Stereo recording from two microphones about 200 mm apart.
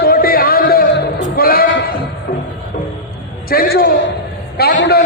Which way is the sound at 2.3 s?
50° left (ahead or behind).